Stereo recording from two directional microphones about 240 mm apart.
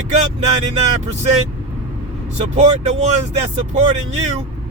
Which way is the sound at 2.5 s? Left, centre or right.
Right.